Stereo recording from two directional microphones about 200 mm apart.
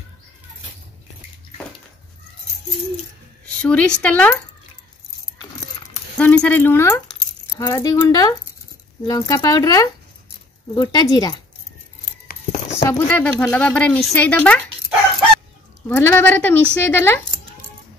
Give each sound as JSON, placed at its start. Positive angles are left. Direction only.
{"t": 3.6, "sound": "a woman's voice", "side_deg": 5}
{"t": 6.1, "sound": "speech", "side_deg": 5}
{"t": 12.3, "sound": "a sound", "side_deg": 35}
{"t": 12.8, "sound": "speech", "side_deg": 10}
{"t": 15.9, "sound": "speech", "side_deg": 10}